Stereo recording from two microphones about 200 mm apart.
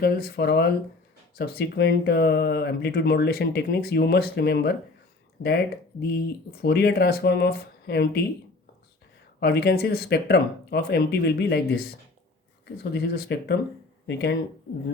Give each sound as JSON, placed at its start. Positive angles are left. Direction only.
{"t": 0.0, "sound": "speech", "side_deg": 50}
{"t": 9.4, "sound": "speech", "side_deg": 55}
{"t": 12.6, "sound": "speech", "side_deg": 55}